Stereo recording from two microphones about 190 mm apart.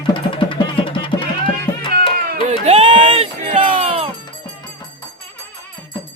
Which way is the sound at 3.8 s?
30° right (ahead or behind).